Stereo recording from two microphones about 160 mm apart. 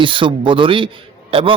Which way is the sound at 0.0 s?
30° right (ahead or behind).